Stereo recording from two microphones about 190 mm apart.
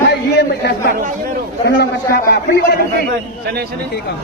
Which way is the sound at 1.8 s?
55° left (ahead or behind).